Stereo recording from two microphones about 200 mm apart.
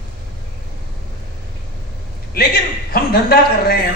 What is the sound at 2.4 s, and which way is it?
A man's voice, 50° left (ahead or behind).